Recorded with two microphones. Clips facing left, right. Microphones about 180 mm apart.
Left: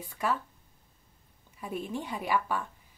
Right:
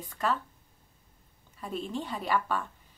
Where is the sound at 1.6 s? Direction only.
10° left (ahead or behind).